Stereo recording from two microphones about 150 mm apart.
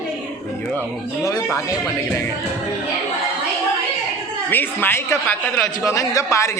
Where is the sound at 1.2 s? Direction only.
20° left (ahead or behind).